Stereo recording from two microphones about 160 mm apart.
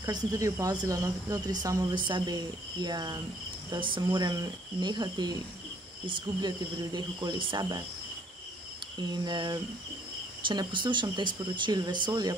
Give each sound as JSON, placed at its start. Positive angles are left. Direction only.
{"t": 0.0, "sound": "speech", "side_deg": -20}
{"t": 9.2, "sound": "speech", "side_deg": -25}